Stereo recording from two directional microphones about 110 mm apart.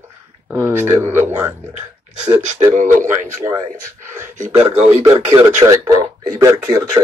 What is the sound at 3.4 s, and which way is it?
Speech, 40° right (ahead or behind).